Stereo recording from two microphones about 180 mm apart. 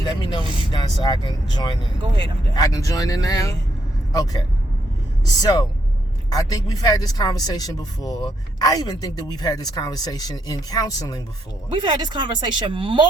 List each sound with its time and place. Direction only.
0.2 s speech: 25° left (ahead or behind)
5.4 s speech: 20° left (ahead or behind)
11.7 s speech: 25° right (ahead or behind)